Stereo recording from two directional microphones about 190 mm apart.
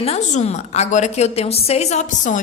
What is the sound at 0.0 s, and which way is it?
A woman's voice, 35° left (ahead or behind).